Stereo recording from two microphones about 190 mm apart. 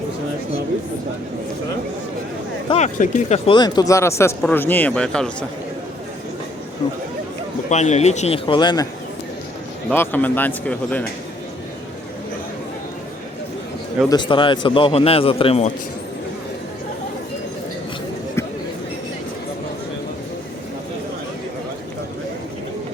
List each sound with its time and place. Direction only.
2.6 s speech: 35° left (ahead or behind)
3.5 s a man's voice: 20° left (ahead or behind); by 5.5 s 5° left (ahead or behind)
7.7 s speech: 35° left (ahead or behind); by 8.9 s 20° left (ahead or behind)
9.9 s speech: 10° left (ahead or behind)
14.1 s a man's voice: 25° left (ahead or behind)